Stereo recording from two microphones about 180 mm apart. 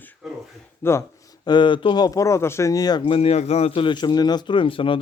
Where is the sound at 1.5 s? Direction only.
25° left (ahead or behind).